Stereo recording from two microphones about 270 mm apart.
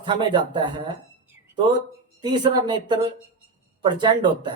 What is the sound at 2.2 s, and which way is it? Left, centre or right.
Speech, centre.